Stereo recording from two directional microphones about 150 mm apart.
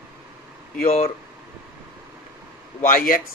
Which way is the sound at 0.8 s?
45° left (ahead or behind).